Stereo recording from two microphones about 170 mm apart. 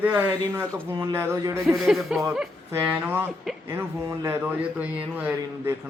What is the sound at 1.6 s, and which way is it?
Speech, centre (ahead or behind).